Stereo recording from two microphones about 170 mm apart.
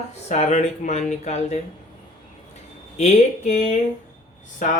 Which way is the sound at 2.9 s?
40° left (ahead or behind).